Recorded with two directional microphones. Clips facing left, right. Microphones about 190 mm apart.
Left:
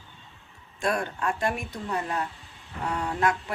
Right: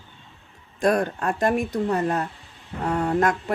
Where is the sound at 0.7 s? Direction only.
40° right (ahead or behind).